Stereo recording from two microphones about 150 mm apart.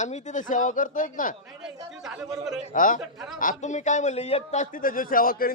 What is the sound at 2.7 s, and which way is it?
A man's voice, 60° left (ahead or behind).